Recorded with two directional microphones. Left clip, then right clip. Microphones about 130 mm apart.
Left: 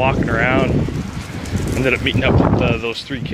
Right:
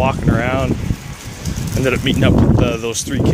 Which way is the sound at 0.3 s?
25° right (ahead or behind).